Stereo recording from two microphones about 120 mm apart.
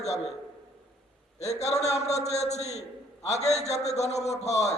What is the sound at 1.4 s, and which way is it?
A man's voice, 65° left (ahead or behind).